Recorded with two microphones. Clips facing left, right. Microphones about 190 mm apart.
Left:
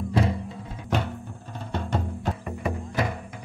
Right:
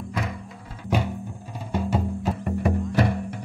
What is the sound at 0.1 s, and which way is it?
Music, 30° left (ahead or behind).